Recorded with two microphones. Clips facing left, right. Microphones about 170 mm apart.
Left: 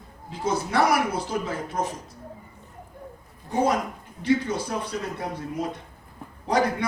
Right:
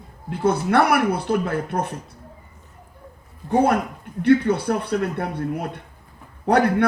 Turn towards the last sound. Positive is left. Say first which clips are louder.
# right 6 dB
turn(degrees=-60)  # may be behind; listen again after turning